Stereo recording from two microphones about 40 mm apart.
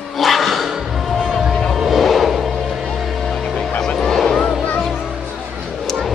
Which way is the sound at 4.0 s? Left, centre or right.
Centre.